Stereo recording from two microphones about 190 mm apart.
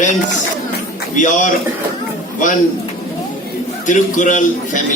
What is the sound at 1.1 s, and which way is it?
Speech, 40° left (ahead or behind).